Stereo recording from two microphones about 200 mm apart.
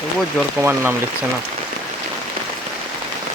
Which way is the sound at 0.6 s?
10° right (ahead or behind).